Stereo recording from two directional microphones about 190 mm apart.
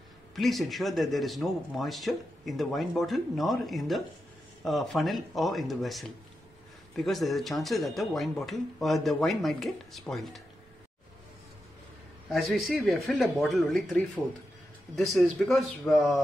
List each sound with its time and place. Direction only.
0.4 s speech: centre (ahead or behind)
12.3 s speech: centre (ahead or behind)